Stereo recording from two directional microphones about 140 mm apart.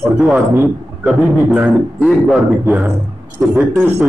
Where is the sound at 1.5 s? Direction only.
10° right (ahead or behind).